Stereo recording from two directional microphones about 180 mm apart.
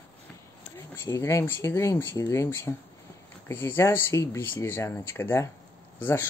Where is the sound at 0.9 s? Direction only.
15° left (ahead or behind).